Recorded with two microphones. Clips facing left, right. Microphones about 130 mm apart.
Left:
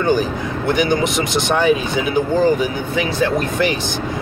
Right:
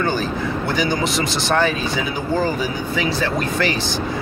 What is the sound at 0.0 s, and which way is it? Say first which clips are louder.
A man's voice: left 4 dB; 15° left (ahead or behind).